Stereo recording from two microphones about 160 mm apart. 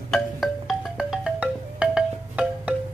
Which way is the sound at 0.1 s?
Centre (ahead or behind).